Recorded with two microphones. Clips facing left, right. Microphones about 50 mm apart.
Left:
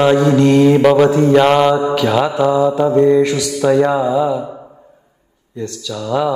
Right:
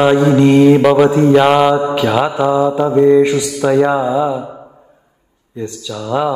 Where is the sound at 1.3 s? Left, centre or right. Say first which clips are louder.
Right 1 dB; centre.